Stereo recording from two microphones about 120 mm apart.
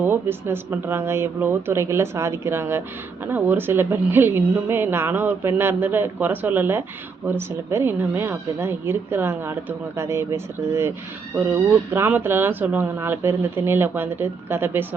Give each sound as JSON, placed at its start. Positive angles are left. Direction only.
{"t": 0.0, "sound": "a woman's voice", "side_deg": -20}